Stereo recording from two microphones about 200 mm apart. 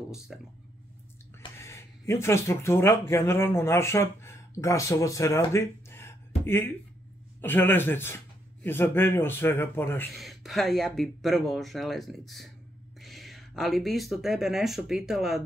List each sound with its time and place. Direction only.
0.3 s speech: centre (ahead or behind)
1.6 s a man's voice: 15° left (ahead or behind)
10.1 s speech: centre (ahead or behind)